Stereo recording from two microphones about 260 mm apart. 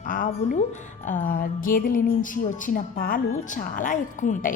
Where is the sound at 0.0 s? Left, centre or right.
Left.